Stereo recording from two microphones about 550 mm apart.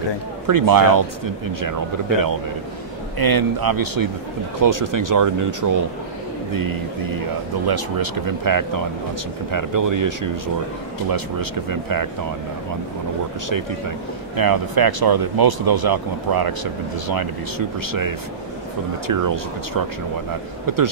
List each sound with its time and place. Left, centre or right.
0.5 s speech: right
11.7 s speech: right
13.5 s speech: right
20.6 s speech: right